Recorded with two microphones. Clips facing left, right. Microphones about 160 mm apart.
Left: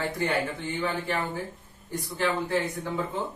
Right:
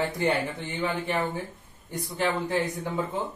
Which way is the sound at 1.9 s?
20° right (ahead or behind).